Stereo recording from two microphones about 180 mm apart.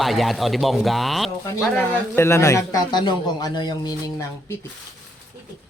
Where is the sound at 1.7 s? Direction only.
15° left (ahead or behind).